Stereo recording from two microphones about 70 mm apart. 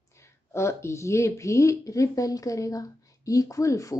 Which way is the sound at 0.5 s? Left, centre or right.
Left.